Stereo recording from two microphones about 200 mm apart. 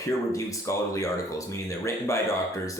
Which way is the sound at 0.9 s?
15° left (ahead or behind).